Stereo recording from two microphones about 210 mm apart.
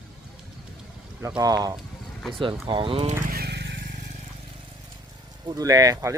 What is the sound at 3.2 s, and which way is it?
Vehicle, 45° right (ahead or behind).